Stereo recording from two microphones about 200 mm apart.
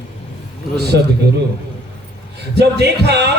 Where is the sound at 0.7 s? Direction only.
55° right (ahead or behind).